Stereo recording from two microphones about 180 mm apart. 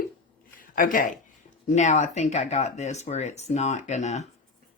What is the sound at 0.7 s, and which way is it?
Speech, 50° left (ahead or behind).